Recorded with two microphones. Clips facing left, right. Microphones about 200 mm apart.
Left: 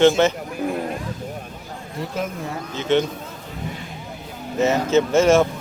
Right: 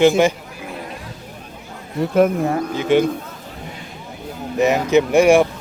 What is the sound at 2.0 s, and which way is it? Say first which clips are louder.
Speech: right 12 dB; 55° right (ahead or behind).